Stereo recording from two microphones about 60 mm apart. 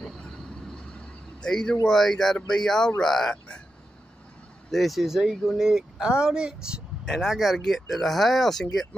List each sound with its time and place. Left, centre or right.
0.3 s vehicle: centre
1.9 s speech: centre
4.6 s speech: centre
7.2 s speech: centre